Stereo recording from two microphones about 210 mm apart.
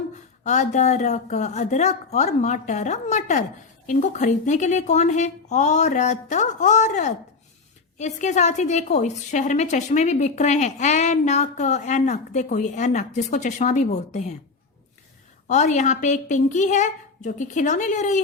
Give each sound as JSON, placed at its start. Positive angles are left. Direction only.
{"t": 0.4, "sound": "a woman's voice", "side_deg": 35}
{"t": 15.4, "sound": "a woman's voice", "side_deg": 35}